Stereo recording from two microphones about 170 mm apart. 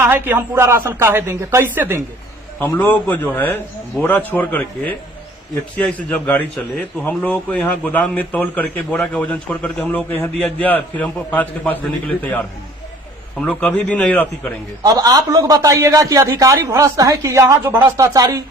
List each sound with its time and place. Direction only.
0.0 s a woman's voice: 10° right (ahead or behind)
2.6 s a man's voice: 10° left (ahead or behind)
14.8 s a man's voice: 20° right (ahead or behind)